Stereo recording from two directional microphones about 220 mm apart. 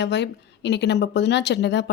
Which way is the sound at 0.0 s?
50° left (ahead or behind).